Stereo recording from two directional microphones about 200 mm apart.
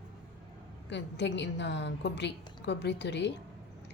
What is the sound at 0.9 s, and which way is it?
A woman's voice, 60° left (ahead or behind).